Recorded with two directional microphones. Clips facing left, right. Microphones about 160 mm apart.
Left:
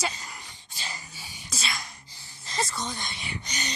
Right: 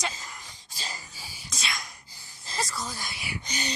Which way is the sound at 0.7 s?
35° right (ahead or behind).